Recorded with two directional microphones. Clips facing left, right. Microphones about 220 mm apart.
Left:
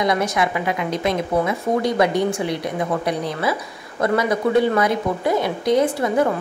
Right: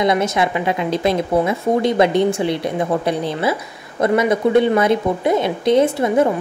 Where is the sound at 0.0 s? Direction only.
25° right (ahead or behind).